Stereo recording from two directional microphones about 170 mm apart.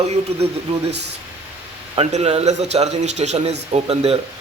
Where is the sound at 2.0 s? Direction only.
35° right (ahead or behind).